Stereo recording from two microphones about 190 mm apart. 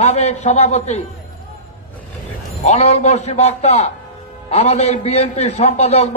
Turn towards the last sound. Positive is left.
turn(degrees=35)  # may be behind; listen again after turning